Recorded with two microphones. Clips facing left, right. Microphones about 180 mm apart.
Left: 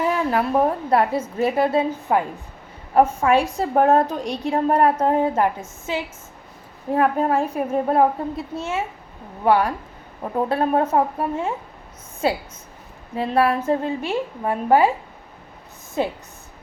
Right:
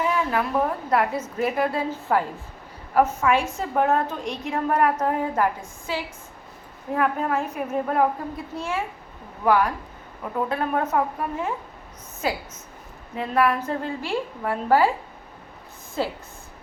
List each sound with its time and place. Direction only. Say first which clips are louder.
0.1 s a woman's voice: left 3 dB; 35° left (ahead or behind)
2.1 s a woman's voice: left 2 dB; 20° left (ahead or behind)
2.9 s a woman's voice: left 4 dB; 30° left (ahead or behind)
6.9 s a woman's voice: left 4 dB; 30° left (ahead or behind)
16.0 s a woman's voice: left 3 dB; 20° left (ahead or behind)